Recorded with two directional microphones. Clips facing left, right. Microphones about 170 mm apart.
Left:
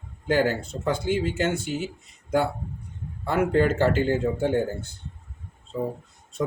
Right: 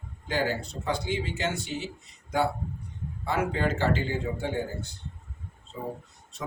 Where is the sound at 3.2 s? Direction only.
55° left (ahead or behind).